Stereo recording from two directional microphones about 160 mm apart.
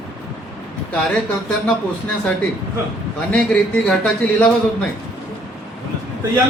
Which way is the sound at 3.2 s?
5° left (ahead or behind).